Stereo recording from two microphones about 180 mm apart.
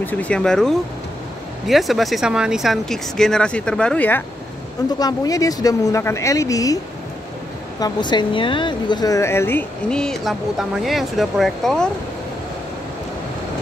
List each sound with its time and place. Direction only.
0.0 s speech: 5° left (ahead or behind)
4.9 s speech: 20° left (ahead or behind)
7.8 s speech: 25° left (ahead or behind); by 11.9 s centre (ahead or behind)